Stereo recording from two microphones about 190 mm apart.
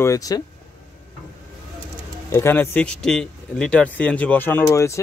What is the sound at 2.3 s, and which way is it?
Speech, 10° left (ahead or behind).